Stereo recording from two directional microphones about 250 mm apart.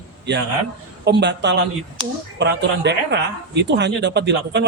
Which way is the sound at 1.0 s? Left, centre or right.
Right.